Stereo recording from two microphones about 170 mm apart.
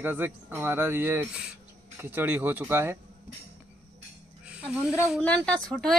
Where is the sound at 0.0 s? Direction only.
10° right (ahead or behind).